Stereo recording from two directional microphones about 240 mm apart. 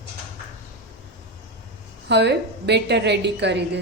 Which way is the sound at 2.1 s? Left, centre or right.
Right.